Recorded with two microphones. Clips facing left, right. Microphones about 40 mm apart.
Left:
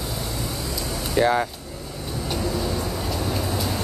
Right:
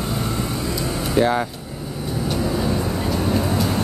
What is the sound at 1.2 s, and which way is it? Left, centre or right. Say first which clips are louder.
Speech: right 1 dB; centre.